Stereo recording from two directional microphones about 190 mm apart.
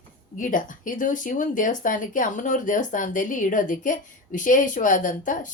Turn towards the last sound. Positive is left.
turn(degrees=45)  # may be behind; listen again after turning